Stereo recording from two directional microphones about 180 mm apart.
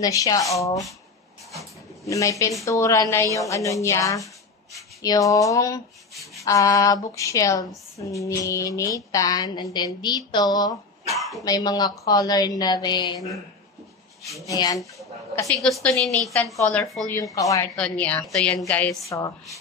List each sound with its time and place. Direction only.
0.0 s a woman's voice: 20° left (ahead or behind)
11.1 s dog: centre (ahead or behind)
11.4 s a woman's voice: 20° left (ahead or behind)
14.6 s a woman's voice: 20° left (ahead or behind)
15.6 s a woman's voice: 5° left (ahead or behind); by 17.6 s 20° left (ahead or behind)
17.7 s a woman's voice: 5° left (ahead or behind)